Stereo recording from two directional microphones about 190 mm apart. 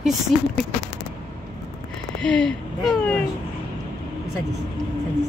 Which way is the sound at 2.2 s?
5° left (ahead or behind).